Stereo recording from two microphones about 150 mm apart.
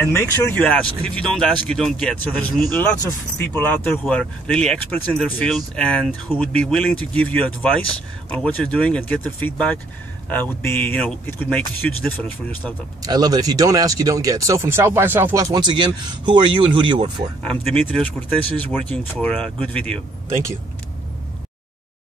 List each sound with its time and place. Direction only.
0.0 s speech: 15° left (ahead or behind)
13.0 s speech: 25° right (ahead or behind)
15.5 s speech: 30° right (ahead or behind)
17.4 s speech: 5° left (ahead or behind)